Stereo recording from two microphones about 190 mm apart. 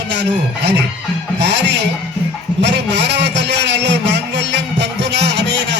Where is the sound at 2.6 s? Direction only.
65° right (ahead or behind).